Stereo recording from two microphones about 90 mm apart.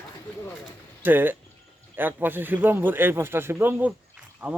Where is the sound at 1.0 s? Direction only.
20° right (ahead or behind).